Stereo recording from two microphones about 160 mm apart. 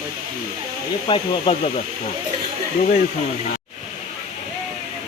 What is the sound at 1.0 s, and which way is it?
Speech, 35° left (ahead or behind).